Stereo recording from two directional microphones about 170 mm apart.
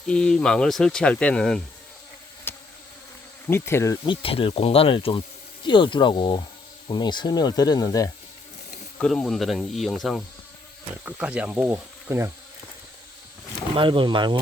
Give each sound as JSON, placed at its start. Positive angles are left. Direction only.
{"t": 0.1, "sound": "speech", "side_deg": 5}
{"t": 2.5, "sound": "insect", "side_deg": 10}
{"t": 3.4, "sound": "speech", "side_deg": 15}
{"t": 4.0, "sound": "speech", "side_deg": 30}
{"t": 9.0, "sound": "speech", "side_deg": 5}
{"t": 13.7, "sound": "speech", "side_deg": -30}